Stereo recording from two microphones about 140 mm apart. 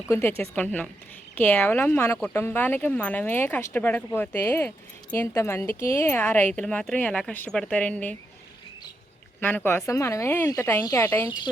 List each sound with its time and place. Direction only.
0.1 s speech: 15° left (ahead or behind)
9.4 s speech: 15° left (ahead or behind)